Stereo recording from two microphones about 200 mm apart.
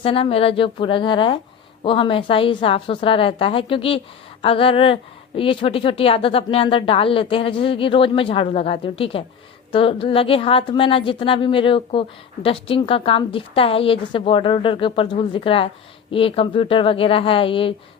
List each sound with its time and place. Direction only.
0.0 s speech: 25° left (ahead or behind)